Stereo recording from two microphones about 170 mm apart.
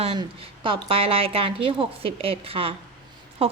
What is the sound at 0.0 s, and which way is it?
A woman's voice, 30° right (ahead or behind).